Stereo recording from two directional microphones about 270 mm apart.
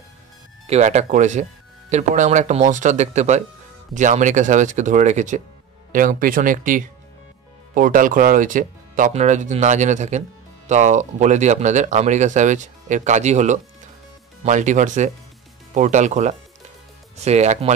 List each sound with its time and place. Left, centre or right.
0.7 s speech: right